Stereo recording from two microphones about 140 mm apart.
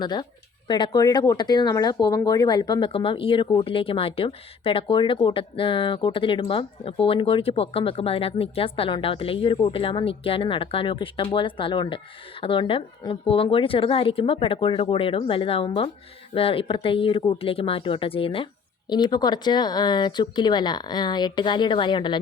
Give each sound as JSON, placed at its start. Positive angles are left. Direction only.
{"t": 0.0, "sound": "speech", "side_deg": 30}